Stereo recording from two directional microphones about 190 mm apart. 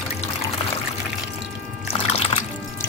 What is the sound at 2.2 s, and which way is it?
Music, 35° left (ahead or behind).